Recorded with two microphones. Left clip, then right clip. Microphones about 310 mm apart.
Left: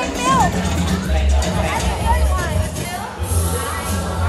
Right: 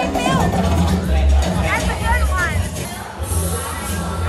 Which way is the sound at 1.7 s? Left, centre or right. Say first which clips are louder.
Right 3 dB; centre.